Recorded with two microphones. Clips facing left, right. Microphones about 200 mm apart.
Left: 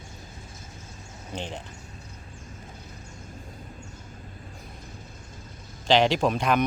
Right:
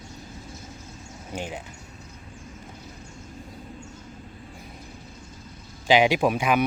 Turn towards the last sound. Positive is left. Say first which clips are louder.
# right 1 dB
turn(degrees=-10)  # may be behind; listen again after turning